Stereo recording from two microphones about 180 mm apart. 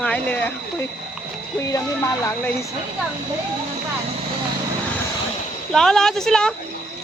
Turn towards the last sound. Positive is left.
turn(degrees=5)  # may be behind; listen again after turning